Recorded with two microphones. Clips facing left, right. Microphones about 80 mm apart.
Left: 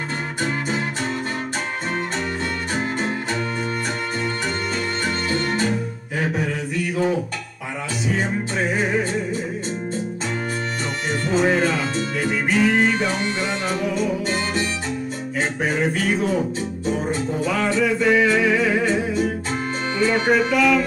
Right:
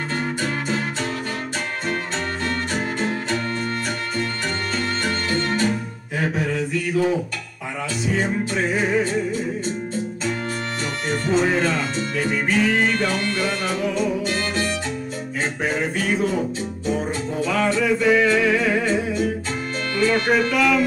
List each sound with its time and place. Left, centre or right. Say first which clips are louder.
0.4 s music: even; centre
2.7 s music: even; centre
5.0 s music: left 1 dB; centre
8.1 s music: right 1 dB; centre
11.2 s music: left 1 dB; centre
15.6 s music: left 2 dB; centre
20.3 s music: left 1 dB; centre